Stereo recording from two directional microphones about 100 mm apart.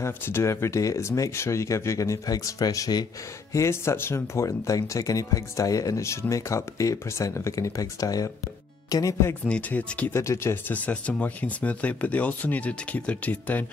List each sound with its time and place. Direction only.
0.0 s speech: 25° left (ahead or behind)
3.5 s speech: 30° left (ahead or behind)
9.3 s speech: 15° left (ahead or behind)
10.1 s speech: 30° left (ahead or behind)